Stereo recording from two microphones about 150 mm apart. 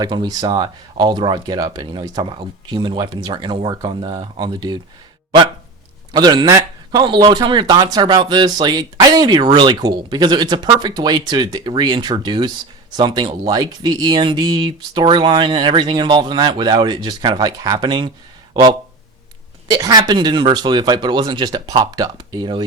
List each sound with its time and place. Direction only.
0.0 s speech: 30° right (ahead or behind)
6.1 s speech: 30° right (ahead or behind)
19.6 s speech: 25° right (ahead or behind)